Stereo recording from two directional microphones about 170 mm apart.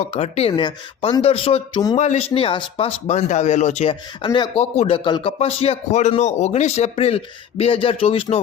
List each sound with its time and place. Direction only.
0.0 s speech: 40° left (ahead or behind)